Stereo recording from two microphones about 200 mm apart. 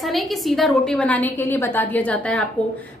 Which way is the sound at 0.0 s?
Centre (ahead or behind).